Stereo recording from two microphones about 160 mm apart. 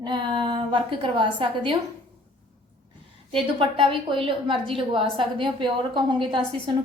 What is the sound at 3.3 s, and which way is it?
A woman's voice, 30° right (ahead or behind).